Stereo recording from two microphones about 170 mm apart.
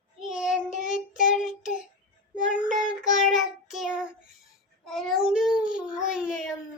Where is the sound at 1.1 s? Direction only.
50° left (ahead or behind).